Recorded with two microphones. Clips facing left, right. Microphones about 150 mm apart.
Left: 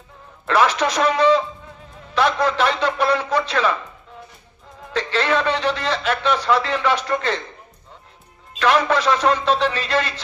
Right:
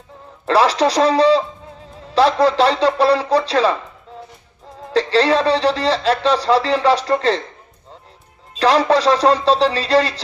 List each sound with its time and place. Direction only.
0.4 s speech: 35° right (ahead or behind)
4.9 s speech: 35° right (ahead or behind)
8.5 s speech: 35° right (ahead or behind)